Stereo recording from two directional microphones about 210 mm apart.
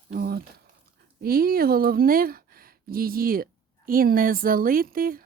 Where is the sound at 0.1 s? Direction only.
45° right (ahead or behind).